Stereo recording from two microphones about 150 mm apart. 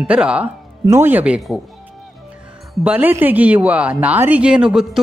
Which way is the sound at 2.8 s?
10° right (ahead or behind).